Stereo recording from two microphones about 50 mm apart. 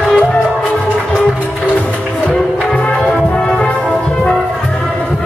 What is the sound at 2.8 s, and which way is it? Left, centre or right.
Music, left.